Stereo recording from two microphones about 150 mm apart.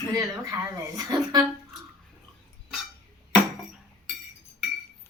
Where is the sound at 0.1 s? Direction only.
20° right (ahead or behind).